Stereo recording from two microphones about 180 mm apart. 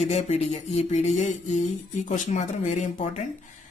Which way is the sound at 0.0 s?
35° left (ahead or behind).